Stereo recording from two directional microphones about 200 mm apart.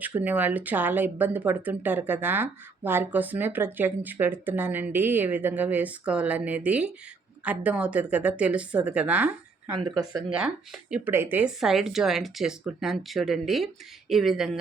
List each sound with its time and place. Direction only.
0.0 s speech: 10° right (ahead or behind)
9.7 s speech: 20° right (ahead or behind)
10.3 s speech: 5° right (ahead or behind)